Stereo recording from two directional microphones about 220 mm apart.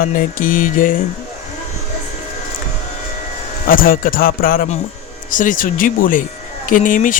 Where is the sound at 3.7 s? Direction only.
40° left (ahead or behind).